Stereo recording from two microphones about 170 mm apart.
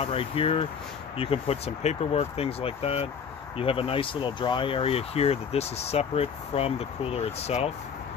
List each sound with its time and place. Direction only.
0.0 s speech: 35° left (ahead or behind)